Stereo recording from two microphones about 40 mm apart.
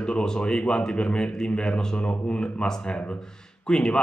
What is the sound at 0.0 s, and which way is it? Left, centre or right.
A man's voice, centre.